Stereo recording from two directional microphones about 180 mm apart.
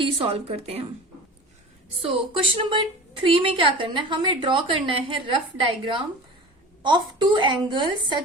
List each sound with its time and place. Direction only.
0.0 s a woman's voice: 30° right (ahead or behind)
2.5 s a woman's voice: 30° right (ahead or behind)